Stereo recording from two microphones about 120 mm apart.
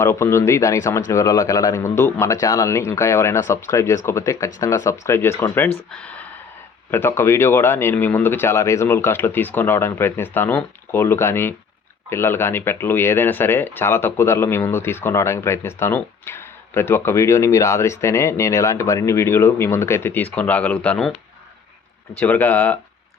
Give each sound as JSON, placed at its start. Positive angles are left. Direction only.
{"t": 0.0, "sound": "speech", "side_deg": 20}
{"t": 22.2, "sound": "speech", "side_deg": 15}